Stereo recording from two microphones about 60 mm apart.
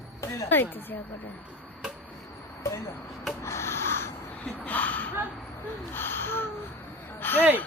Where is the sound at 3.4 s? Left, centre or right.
Left.